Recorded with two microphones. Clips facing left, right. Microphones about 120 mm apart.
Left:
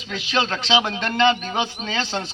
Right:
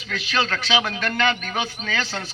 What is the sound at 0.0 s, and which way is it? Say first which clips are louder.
A man's voice: left 1 dB; 20° left (ahead or behind).